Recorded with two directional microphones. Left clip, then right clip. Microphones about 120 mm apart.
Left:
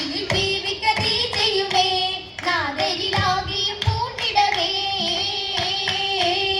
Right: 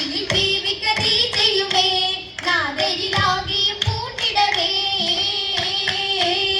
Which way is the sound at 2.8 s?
50° right (ahead or behind).